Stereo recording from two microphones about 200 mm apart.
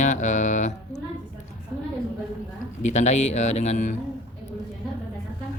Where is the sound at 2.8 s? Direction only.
35° left (ahead or behind).